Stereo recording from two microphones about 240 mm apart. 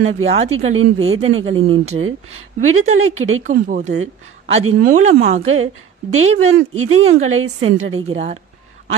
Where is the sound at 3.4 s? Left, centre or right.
Right.